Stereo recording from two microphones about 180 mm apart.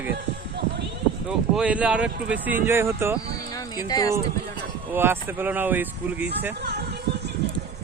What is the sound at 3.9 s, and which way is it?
Speech, 20° left (ahead or behind).